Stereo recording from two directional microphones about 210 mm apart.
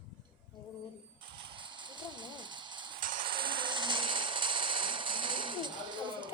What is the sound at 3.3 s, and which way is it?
Music, 25° right (ahead or behind).